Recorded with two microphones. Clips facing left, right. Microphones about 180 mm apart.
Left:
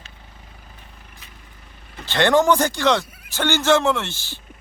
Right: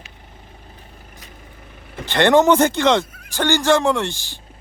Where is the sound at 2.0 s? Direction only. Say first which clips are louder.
Right 3 dB; 20° right (ahead or behind).